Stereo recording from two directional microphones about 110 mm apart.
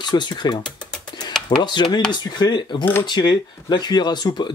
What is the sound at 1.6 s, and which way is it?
Speech, 45° left (ahead or behind).